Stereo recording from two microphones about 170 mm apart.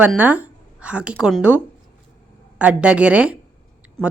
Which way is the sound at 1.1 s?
Centre (ahead or behind).